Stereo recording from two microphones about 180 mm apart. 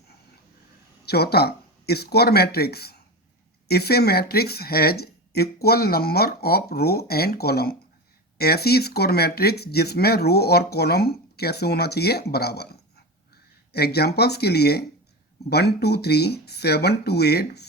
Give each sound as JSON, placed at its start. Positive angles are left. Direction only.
{"t": 1.0, "sound": "speech", "side_deg": 65}
{"t": 13.7, "sound": "speech", "side_deg": 60}